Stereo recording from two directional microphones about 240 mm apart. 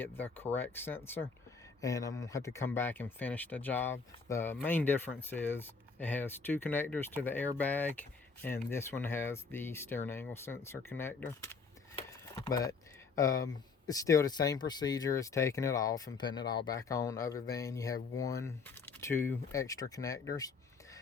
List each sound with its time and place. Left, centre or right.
0.0 s speech: centre